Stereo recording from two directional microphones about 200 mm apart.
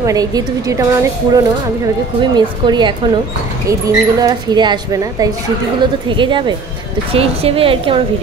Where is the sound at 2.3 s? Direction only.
20° right (ahead or behind).